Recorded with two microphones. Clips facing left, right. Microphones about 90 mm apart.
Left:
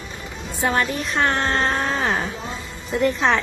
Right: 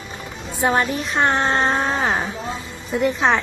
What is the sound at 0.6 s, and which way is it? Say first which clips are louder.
Speech: right 2 dB; 25° right (ahead or behind).